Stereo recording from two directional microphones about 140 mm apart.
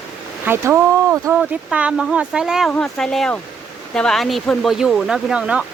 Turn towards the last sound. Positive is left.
turn(degrees=-5)  # may be behind; listen again after turning